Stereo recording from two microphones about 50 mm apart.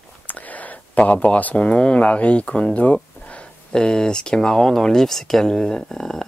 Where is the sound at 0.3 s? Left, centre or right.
Left.